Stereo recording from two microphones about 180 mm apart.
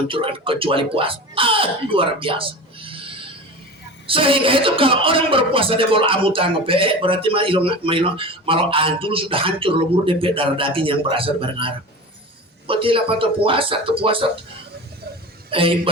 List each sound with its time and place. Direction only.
0.1 s speech: 30° right (ahead or behind)
15.4 s a man's voice: 30° right (ahead or behind)